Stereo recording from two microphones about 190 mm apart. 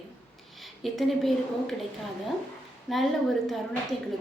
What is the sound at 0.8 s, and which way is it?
Speech, centre (ahead or behind).